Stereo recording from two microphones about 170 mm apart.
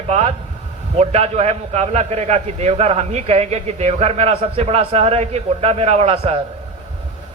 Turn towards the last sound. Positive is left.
turn(degrees=-35)  # may be behind; listen again after turning